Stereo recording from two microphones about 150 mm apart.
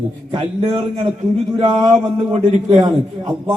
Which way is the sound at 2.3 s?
40° right (ahead or behind).